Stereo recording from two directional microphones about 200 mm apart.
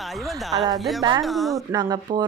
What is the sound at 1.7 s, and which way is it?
Speech, 20° right (ahead or behind).